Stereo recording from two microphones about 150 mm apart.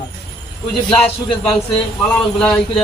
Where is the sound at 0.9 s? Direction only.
10° left (ahead or behind).